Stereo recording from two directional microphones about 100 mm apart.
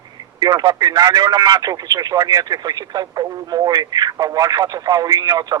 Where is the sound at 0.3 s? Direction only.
45° right (ahead or behind).